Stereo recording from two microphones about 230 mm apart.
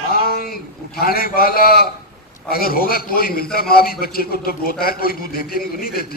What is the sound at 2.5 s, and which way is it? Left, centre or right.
A man's voice, left.